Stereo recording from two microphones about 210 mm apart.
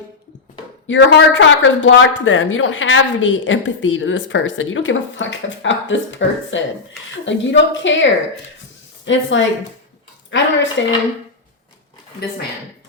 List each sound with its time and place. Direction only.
0.9 s speech: 60° left (ahead or behind)
9.0 s speech: 60° left (ahead or behind)